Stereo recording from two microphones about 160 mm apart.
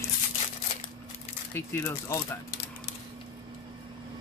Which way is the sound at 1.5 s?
15° left (ahead or behind).